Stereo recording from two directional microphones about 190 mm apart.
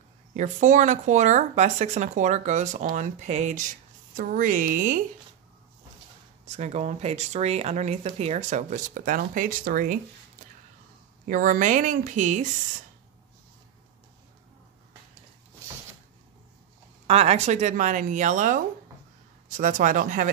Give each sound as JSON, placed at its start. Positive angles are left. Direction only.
{"t": 0.3, "sound": "a woman's voice", "side_deg": -40}
{"t": 6.4, "sound": "speech", "side_deg": -35}
{"t": 11.2, "sound": "speech", "side_deg": -45}
{"t": 17.1, "sound": "a woman's voice", "side_deg": -35}